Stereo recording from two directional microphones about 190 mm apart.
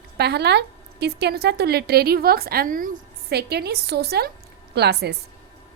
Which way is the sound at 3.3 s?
60° right (ahead or behind).